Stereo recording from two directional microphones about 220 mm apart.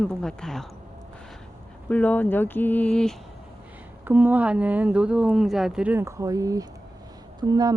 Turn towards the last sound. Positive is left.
turn(degrees=-15)  # may be behind; listen again after turning